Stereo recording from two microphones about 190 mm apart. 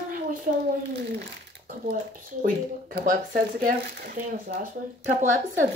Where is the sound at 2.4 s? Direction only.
50° right (ahead or behind).